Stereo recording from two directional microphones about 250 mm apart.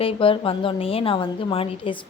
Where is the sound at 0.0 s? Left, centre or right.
Left.